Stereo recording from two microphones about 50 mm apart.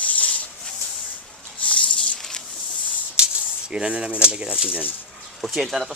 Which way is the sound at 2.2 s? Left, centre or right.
Centre.